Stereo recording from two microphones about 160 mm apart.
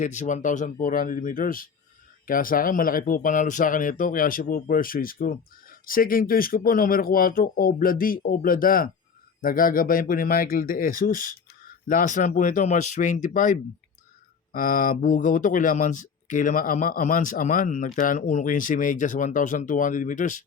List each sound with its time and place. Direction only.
0.0 s speech: 50° left (ahead or behind)